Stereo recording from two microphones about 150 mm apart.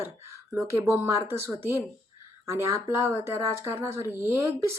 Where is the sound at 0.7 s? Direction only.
20° right (ahead or behind).